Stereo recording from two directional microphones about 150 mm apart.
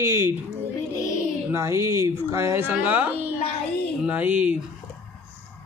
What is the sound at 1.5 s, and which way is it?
A man's voice, 20° right (ahead or behind).